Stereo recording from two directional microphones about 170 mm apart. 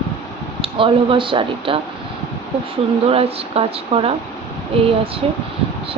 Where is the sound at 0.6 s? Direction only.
30° right (ahead or behind).